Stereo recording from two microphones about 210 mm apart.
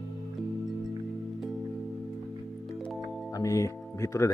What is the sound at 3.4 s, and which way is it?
Speech, 15° left (ahead or behind).